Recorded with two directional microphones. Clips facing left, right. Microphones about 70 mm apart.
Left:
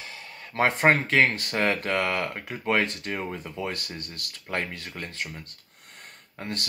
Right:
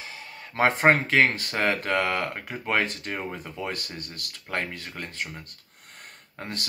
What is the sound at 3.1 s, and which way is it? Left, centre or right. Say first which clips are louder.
Speech: left 1 dB; centre.